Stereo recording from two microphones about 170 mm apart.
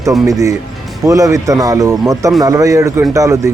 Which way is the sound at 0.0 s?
20° right (ahead or behind).